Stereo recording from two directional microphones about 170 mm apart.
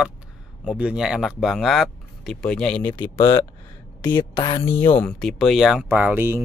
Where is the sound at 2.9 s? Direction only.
20° left (ahead or behind).